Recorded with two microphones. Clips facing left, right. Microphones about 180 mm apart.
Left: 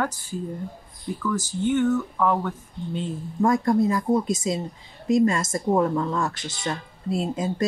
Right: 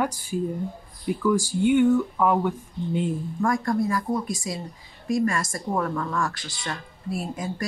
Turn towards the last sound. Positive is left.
turn(degrees=25)  # may be behind; listen again after turning